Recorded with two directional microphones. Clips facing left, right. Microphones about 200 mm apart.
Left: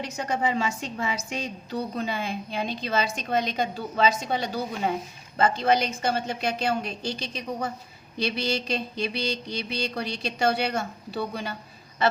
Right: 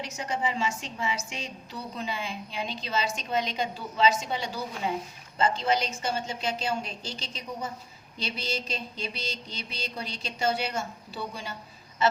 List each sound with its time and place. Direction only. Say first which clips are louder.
0.2 s a woman's voice: left 4 dB; 60° left (ahead or behind)
8.2 s mantra: left 6 dB; 65° left (ahead or behind)